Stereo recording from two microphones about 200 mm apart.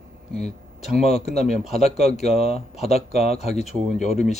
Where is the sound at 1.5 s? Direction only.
Centre (ahead or behind).